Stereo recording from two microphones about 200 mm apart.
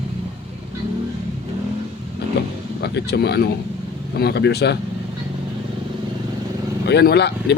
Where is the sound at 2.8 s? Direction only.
55° left (ahead or behind).